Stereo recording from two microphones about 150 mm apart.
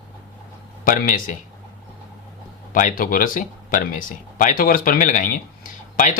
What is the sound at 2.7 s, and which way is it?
Speech, 65° left (ahead or behind).